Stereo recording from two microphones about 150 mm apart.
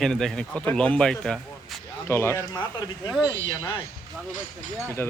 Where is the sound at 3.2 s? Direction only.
30° left (ahead or behind).